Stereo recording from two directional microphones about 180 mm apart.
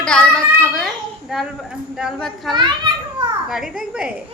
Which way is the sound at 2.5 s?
25° right (ahead or behind).